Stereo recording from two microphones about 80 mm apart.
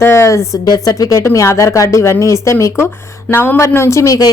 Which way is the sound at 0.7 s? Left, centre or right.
Left.